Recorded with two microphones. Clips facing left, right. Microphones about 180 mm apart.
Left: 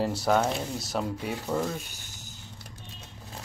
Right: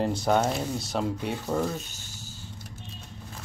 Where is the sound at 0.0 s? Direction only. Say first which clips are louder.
Right 1 dB; 5° left (ahead or behind).